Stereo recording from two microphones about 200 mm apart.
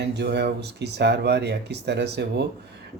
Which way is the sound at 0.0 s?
55° right (ahead or behind).